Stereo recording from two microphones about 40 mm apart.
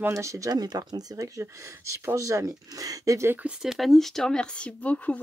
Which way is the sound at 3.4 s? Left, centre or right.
Right.